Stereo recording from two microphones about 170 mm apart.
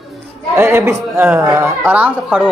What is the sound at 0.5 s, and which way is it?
Speech, 15° right (ahead or behind).